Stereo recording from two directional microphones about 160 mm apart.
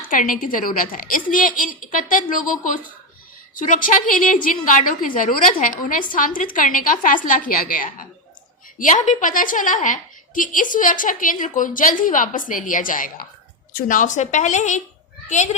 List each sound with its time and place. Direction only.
0.1 s a woman's voice: 60° left (ahead or behind)
3.5 s a woman's voice: 55° left (ahead or behind)